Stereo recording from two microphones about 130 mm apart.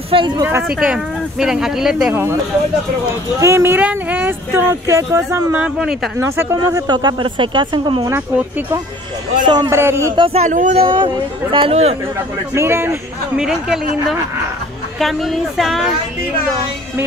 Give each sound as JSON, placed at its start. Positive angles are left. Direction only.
{"t": 0.4, "sound": "a man's voice", "side_deg": -20}
{"t": 1.4, "sound": "speech", "side_deg": -5}
{"t": 3.3, "sound": "speech", "side_deg": -20}
{"t": 5.6, "sound": "speech", "side_deg": -5}
{"t": 6.1, "sound": "speech", "side_deg": -20}
{"t": 9.4, "sound": "speech", "side_deg": -35}
{"t": 9.7, "sound": "a man's voice", "side_deg": -20}
{"t": 10.1, "sound": "speech", "side_deg": -45}
{"t": 10.4, "sound": "speech", "side_deg": -70}
{"t": 10.8, "sound": "speech", "side_deg": -40}
{"t": 12.5, "sound": "a man's voice", "side_deg": -20}
{"t": 13.4, "sound": "speech", "side_deg": -5}
{"t": 15.0, "sound": "speech", "side_deg": 0}